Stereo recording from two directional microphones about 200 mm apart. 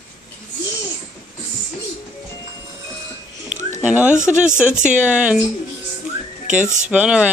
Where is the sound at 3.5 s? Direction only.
40° right (ahead or behind).